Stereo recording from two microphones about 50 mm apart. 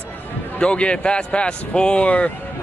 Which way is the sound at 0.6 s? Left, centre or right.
Left.